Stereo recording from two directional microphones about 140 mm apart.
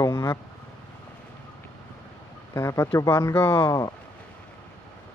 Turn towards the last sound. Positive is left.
turn(degrees=25)  # may be behind; listen again after turning